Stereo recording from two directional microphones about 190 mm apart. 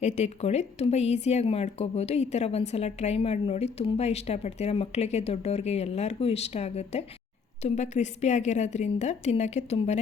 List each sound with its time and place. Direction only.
0.0 s speech: 35° left (ahead or behind)